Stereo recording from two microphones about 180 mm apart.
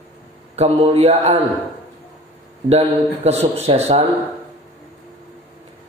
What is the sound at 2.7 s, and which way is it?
A man's voice, 35° right (ahead or behind).